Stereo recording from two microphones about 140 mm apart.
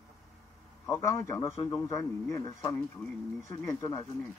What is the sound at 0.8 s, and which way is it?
Speech, 20° left (ahead or behind).